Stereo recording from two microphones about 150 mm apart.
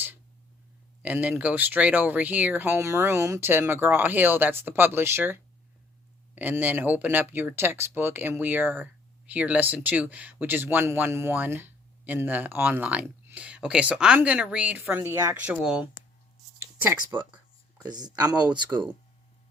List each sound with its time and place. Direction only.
1.0 s speech: 10° right (ahead or behind)
16.6 s a sound: 15° right (ahead or behind)
18.0 s speech: 25° right (ahead or behind)